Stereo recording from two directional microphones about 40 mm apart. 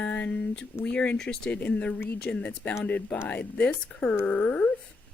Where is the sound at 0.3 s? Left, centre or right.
Left.